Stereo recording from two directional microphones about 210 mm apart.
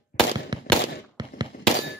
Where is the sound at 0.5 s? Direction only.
20° right (ahead or behind).